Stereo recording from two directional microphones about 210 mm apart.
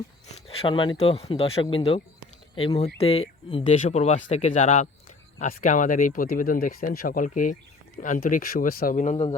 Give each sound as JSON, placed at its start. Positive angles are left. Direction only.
{"t": 0.3, "sound": "speech", "side_deg": 25}